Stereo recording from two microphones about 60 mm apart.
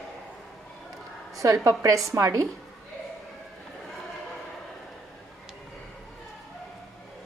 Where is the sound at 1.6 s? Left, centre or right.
Right.